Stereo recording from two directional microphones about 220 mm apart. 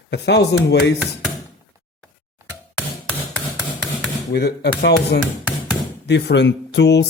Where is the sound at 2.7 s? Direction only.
Centre (ahead or behind).